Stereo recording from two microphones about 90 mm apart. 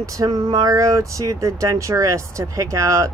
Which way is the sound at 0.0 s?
40° right (ahead or behind).